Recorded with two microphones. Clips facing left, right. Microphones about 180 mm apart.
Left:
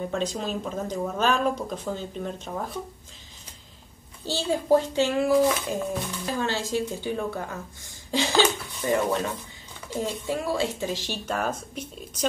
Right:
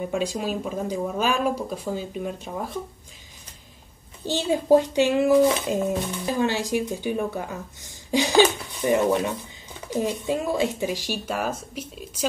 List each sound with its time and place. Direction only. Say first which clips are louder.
0.0 s a child's voice: right 2 dB; 10° right (ahead or behind)
4.2 s a child's voice: right 3 dB; 20° right (ahead or behind)